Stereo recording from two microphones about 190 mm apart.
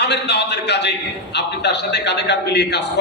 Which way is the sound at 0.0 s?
60° left (ahead or behind).